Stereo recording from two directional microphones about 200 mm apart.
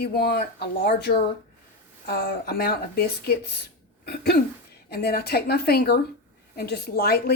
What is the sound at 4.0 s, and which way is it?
Hiccup, 55° left (ahead or behind).